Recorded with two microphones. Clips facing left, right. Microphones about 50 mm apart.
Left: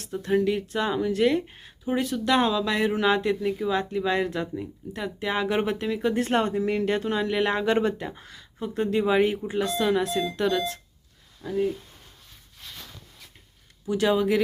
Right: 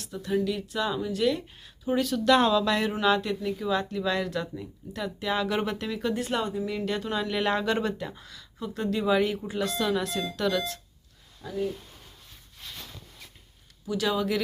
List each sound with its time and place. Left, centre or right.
0.0 s speech: left
2.0 s speech: left
6.1 s speech: left
13.8 s speech: left